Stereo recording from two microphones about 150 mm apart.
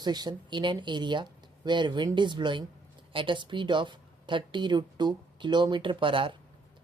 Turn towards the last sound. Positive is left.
turn(degrees=-35)  # may be behind; listen again after turning